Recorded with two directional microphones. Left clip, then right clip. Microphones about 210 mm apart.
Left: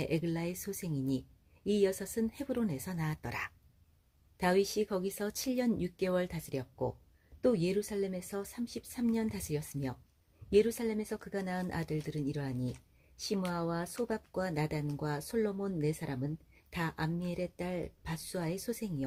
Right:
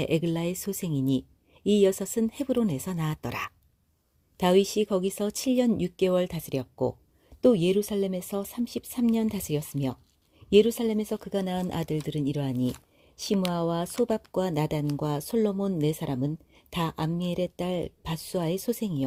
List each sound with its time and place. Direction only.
0.0 s speech: 40° right (ahead or behind)